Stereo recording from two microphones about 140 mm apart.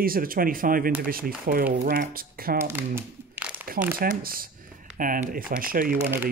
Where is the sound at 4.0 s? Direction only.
90° right.